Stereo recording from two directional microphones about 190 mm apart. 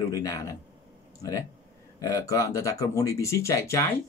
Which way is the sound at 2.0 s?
15° left (ahead or behind).